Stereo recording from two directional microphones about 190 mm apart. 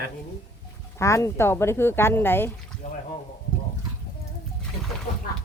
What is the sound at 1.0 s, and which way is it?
Speech, 15° left (ahead or behind).